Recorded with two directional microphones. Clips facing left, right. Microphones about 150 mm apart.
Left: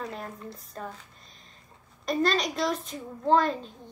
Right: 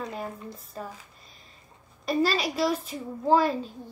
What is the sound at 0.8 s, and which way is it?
Speech, 5° right (ahead or behind).